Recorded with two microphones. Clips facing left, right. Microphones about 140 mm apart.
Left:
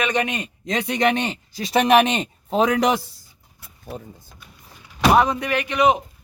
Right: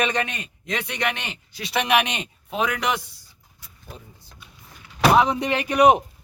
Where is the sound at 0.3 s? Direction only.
40° left (ahead or behind).